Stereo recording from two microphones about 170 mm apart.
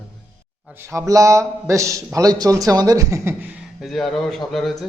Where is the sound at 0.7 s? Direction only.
15° right (ahead or behind).